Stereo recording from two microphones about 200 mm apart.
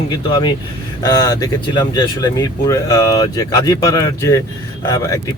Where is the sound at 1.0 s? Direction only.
15° left (ahead or behind).